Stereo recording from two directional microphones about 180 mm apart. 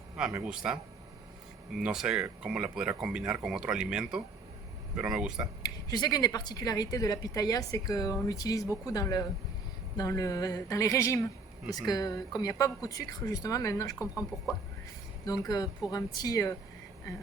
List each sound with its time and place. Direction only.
0.4 s speech: 5° right (ahead or behind)
5.6 s a woman's voice: 20° left (ahead or behind)
14.0 s speech: 5° right (ahead or behind)
15.3 s a woman's voice: 20° left (ahead or behind)